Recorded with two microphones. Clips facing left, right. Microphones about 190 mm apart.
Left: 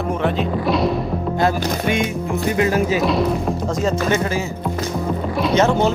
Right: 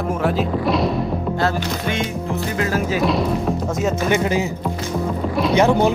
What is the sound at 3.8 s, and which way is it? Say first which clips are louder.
Speech: even; 15° right (ahead or behind).